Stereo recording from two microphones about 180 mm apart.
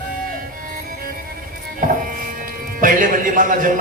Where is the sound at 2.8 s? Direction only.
50° right (ahead or behind).